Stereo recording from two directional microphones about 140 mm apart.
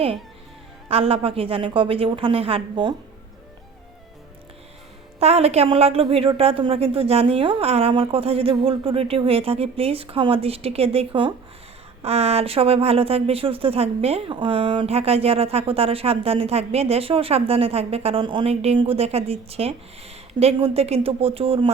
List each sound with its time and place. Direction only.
0.9 s a woman's voice: 45° right (ahead or behind)
5.2 s speech: 50° right (ahead or behind)